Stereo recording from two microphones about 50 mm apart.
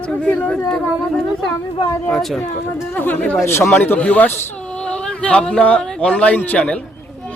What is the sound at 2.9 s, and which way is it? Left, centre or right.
Speech, left.